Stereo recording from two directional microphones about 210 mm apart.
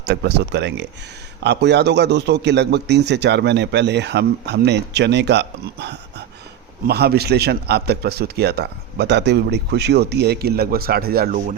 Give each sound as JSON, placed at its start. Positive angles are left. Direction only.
{"t": 0.0, "sound": "a man's voice", "side_deg": -50}